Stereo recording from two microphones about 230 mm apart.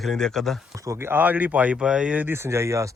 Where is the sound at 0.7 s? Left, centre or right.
Centre.